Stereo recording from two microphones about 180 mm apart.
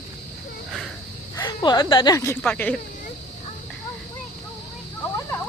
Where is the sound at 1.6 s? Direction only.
25° left (ahead or behind); by 2.7 s 10° left (ahead or behind).